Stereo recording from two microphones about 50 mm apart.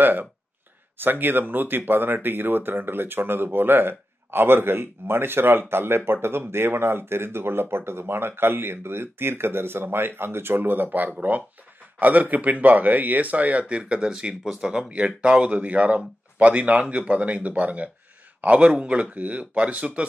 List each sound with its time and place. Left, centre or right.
0.0 s a man's voice: right